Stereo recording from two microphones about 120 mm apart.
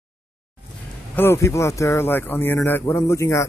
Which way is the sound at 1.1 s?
20° left (ahead or behind).